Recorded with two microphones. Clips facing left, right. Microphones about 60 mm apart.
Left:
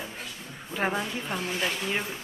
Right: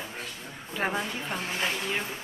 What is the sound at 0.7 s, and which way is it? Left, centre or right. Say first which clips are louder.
Speech: left 1 dB; centre.